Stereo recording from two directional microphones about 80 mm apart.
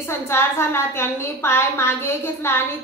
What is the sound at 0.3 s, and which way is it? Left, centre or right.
A woman's voice, left.